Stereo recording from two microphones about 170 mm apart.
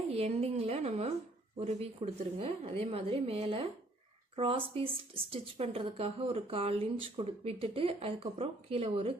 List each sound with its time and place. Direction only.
0.1 s speech: 35° right (ahead or behind)